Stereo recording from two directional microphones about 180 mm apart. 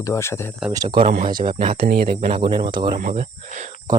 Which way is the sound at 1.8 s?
60° right (ahead or behind).